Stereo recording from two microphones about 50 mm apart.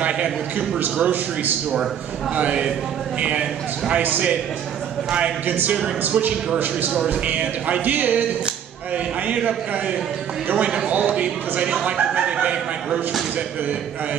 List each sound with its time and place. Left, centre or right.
0.0 s a man's voice: centre
2.3 s a man's voice: right
5.5 s a man's voice: right
10.5 s speech: right